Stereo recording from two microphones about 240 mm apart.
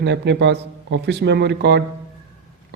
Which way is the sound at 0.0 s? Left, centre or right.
Right.